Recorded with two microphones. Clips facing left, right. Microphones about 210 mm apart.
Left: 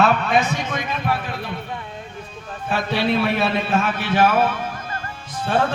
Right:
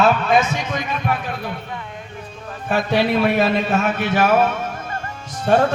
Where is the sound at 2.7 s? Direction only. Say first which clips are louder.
Right 3 dB; 45° right (ahead or behind).